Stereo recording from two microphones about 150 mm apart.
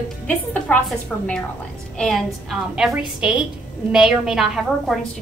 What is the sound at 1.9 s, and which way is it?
Speech, 5° left (ahead or behind).